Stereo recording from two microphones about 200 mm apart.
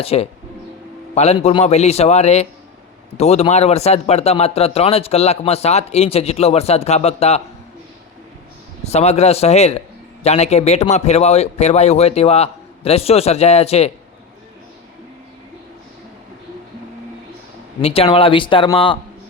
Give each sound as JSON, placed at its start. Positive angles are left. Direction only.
{"t": 0.0, "sound": "a man's voice", "side_deg": 30}
{"t": 8.8, "sound": "a man's voice", "side_deg": 35}
{"t": 17.7, "sound": "speech", "side_deg": 30}